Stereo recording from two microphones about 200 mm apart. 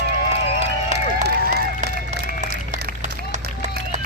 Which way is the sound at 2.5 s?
45° right (ahead or behind).